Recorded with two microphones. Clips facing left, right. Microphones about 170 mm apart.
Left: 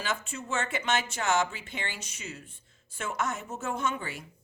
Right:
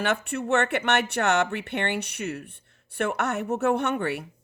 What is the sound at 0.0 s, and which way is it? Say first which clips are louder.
Speech: right 8 dB; 65° right (ahead or behind).